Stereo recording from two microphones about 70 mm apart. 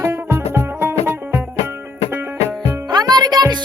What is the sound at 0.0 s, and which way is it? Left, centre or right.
Music, right.